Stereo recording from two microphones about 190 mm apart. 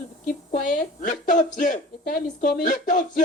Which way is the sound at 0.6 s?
40° left (ahead or behind).